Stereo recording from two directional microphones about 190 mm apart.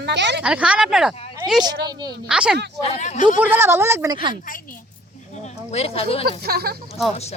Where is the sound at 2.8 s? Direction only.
35° left (ahead or behind).